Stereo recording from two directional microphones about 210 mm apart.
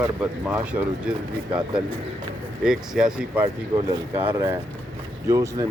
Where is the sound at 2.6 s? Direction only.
Centre (ahead or behind).